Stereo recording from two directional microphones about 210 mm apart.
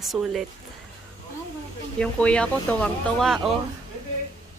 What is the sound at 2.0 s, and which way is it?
A woman's voice, 5° left (ahead or behind).